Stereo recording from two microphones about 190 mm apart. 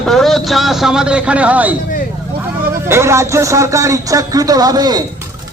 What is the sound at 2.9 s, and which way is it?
Speech, 15° right (ahead or behind).